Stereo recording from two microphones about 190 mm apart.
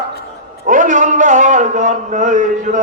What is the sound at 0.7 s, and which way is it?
A man's voice, 40° right (ahead or behind).